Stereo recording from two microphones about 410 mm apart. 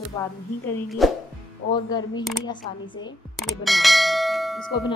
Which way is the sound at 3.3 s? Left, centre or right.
Centre.